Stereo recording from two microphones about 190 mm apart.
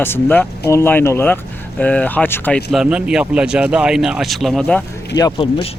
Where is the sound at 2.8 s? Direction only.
5° right (ahead or behind).